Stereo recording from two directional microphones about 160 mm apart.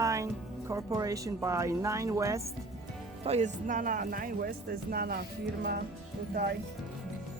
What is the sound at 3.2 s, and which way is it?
Speech, 45° right (ahead or behind).